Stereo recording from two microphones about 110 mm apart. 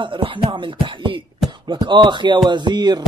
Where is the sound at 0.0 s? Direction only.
50° right (ahead or behind).